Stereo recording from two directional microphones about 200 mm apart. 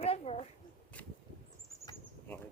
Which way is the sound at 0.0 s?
30° left (ahead or behind).